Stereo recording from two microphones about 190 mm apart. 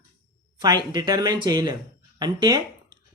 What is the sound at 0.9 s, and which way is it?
Speech, 20° right (ahead or behind).